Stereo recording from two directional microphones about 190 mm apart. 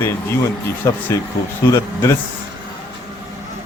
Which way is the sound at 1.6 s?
15° left (ahead or behind).